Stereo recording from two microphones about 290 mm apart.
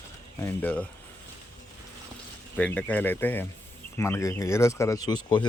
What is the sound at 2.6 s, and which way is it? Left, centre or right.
Speech, centre.